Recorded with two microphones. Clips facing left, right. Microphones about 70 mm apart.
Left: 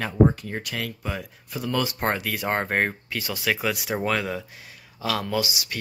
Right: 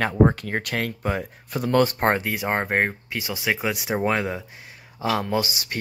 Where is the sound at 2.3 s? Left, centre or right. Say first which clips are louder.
Right 1 dB; centre; by 5.8 s right.